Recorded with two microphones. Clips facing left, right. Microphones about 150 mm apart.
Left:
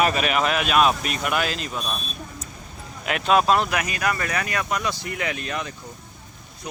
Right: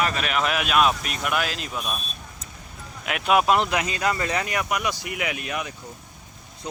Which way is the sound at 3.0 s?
5° right (ahead or behind).